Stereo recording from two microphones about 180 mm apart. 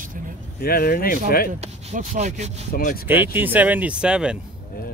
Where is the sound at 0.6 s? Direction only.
55° left (ahead or behind).